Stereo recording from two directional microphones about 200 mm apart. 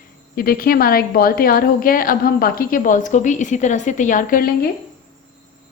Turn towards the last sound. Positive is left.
turn(degrees=45)  # may be behind; listen again after turning